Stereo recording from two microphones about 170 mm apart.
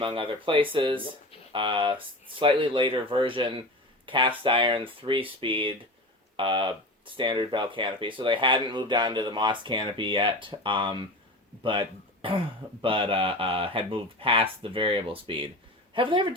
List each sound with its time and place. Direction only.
0.0 s speech: 30° right (ahead or behind)